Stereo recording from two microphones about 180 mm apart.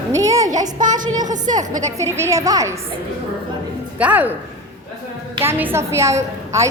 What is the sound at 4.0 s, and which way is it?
Speech, 10° right (ahead or behind).